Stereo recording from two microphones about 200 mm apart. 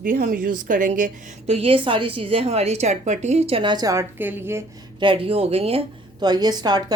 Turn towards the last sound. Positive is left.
turn(degrees=-20)  # may be behind; listen again after turning